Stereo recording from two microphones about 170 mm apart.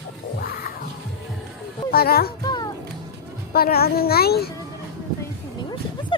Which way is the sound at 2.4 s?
25° left (ahead or behind).